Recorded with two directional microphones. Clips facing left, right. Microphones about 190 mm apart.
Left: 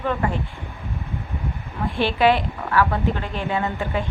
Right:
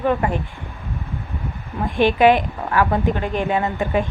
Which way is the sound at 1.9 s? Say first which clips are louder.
Right 4 dB; 15° right (ahead or behind).